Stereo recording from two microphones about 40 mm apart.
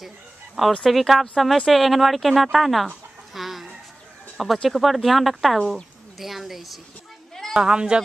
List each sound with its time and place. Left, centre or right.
0.8 s a woman's voice: centre
3.3 s chicken: centre
4.6 s a woman's voice: centre
7.5 s speech: right